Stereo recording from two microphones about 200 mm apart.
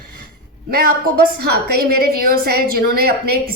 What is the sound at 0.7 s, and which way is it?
Speech, 50° right (ahead or behind).